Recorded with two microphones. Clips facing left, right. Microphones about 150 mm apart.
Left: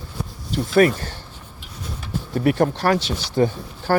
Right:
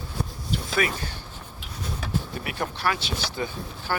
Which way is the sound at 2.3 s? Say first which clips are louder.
Left 12 dB; 45° left (ahead or behind).